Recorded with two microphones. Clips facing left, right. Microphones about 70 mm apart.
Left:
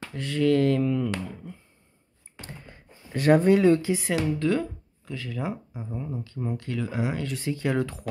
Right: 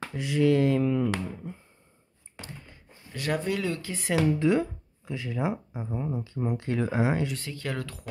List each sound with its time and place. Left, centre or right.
0.0 s a sound: centre
3.1 s speech: left
4.3 s speech: centre
7.3 s speech: centre